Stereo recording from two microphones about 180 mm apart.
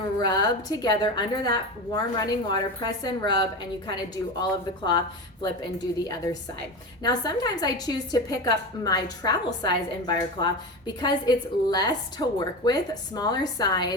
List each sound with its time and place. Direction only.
0.2 s a woman's voice: 20° left (ahead or behind)
7.0 s a woman's voice: 20° left (ahead or behind)